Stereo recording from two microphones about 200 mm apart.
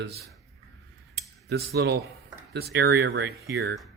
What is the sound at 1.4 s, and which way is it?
Speech, 55° right (ahead or behind).